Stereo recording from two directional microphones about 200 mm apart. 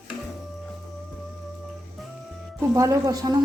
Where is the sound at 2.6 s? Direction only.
15° right (ahead or behind).